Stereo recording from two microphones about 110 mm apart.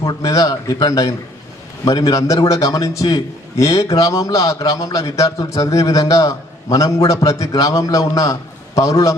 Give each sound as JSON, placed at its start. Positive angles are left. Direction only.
{"t": 0.0, "sound": "a man's voice", "side_deg": 35}